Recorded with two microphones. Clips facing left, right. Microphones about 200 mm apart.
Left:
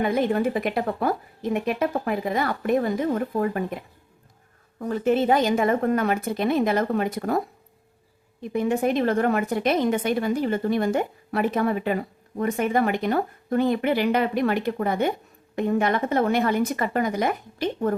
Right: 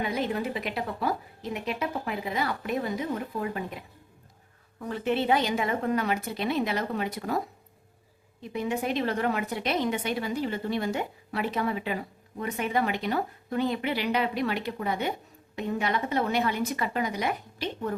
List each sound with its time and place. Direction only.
0.0 s a woman's voice: 50° left (ahead or behind)
4.8 s a woman's voice: 45° left (ahead or behind)